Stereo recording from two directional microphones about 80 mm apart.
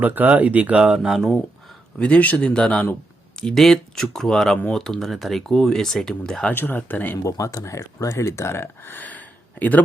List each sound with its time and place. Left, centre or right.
0.0 s speech: right; by 1.3 s centre
2.0 s speech: centre
3.4 s speech: centre
6.5 s speech: left
7.3 s speech: left